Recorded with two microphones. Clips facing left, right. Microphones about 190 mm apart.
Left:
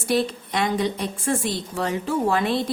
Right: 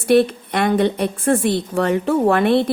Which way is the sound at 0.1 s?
60° right (ahead or behind).